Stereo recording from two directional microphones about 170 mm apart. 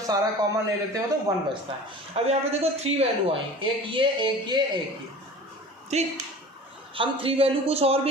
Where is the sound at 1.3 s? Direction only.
20° right (ahead or behind).